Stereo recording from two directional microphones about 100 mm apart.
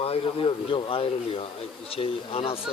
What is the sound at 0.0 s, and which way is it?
Speech, 75° left (ahead or behind).